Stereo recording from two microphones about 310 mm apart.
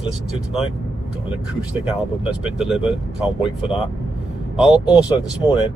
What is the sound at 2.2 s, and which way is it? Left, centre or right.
Speech, centre.